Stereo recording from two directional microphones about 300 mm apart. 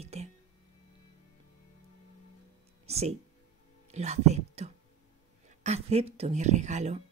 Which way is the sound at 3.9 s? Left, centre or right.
Right.